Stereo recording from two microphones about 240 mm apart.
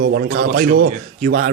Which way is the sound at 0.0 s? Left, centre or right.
Right.